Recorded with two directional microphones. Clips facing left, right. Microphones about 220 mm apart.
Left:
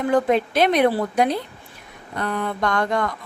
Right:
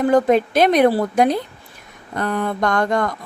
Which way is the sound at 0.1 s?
45° right (ahead or behind).